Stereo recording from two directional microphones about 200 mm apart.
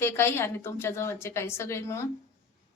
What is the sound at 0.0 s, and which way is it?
A woman's voice, 10° left (ahead or behind).